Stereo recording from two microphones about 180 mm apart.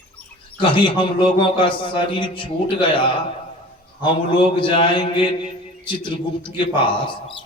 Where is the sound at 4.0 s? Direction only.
30° left (ahead or behind).